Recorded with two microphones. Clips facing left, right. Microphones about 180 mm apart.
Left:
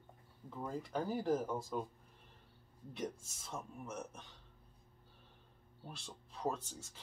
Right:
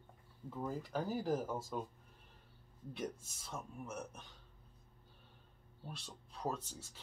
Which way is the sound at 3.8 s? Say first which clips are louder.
Even; 5° right (ahead or behind).